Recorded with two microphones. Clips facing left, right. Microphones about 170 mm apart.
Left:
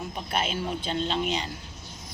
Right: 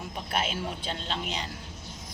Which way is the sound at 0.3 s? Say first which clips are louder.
Left 2 dB; 5° right (ahead or behind).